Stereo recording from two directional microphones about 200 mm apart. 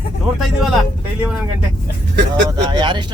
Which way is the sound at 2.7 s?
25° right (ahead or behind).